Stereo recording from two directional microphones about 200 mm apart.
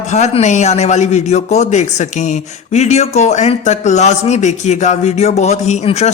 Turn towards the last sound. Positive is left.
turn(degrees=35)  # may be behind; listen again after turning